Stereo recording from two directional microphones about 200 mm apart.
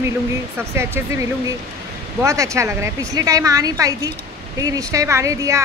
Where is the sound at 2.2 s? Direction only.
15° right (ahead or behind).